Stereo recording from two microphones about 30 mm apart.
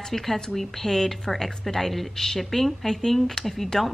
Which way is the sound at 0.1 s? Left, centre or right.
Centre.